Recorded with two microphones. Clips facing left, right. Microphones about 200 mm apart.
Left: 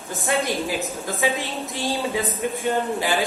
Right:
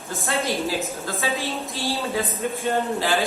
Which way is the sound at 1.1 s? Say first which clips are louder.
Left 3 dB; 15° left (ahead or behind).